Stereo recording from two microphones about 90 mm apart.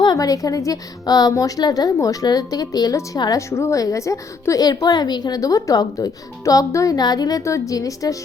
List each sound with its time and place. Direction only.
0.0 s a woman's voice: 45° left (ahead or behind)